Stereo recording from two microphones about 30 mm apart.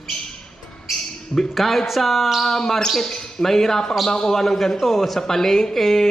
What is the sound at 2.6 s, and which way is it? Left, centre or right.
Speech, centre.